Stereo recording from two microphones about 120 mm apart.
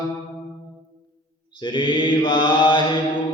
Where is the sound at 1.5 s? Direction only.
45° left (ahead or behind).